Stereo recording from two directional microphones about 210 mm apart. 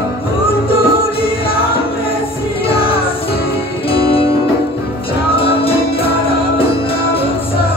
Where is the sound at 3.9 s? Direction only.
25° left (ahead or behind).